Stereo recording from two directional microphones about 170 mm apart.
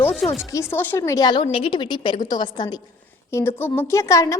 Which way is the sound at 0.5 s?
15° left (ahead or behind).